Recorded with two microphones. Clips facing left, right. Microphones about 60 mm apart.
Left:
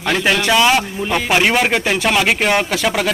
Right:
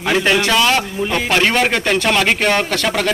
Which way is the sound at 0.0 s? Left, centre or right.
Centre.